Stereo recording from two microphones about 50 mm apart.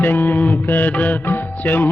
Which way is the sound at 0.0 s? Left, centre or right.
Left.